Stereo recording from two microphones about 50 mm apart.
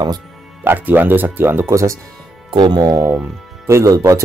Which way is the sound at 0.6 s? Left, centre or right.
Right.